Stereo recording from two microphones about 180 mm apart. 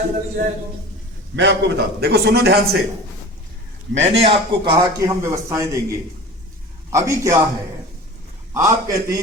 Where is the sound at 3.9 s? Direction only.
90° right.